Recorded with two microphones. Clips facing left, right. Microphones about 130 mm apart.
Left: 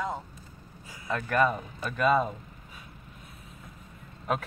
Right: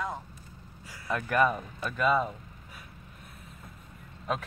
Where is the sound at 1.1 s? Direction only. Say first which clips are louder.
Even; 5° right (ahead or behind).